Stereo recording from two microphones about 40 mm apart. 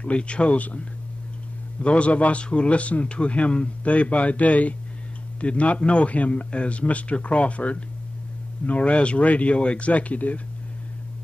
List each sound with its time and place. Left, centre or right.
0.0 s speech: left
1.8 s a man's voice: left